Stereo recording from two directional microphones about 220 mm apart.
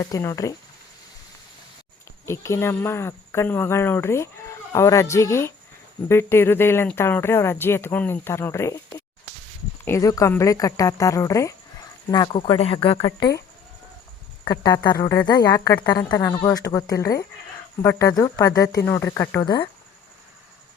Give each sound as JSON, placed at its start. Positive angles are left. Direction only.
{"t": 0.0, "sound": "speech", "side_deg": 15}
{"t": 2.2, "sound": "speech", "side_deg": 10}
{"t": 9.8, "sound": "speech", "side_deg": 15}
{"t": 14.4, "sound": "speech", "side_deg": 20}